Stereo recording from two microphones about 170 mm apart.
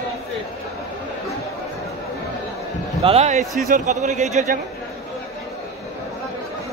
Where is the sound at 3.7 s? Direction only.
45° right (ahead or behind).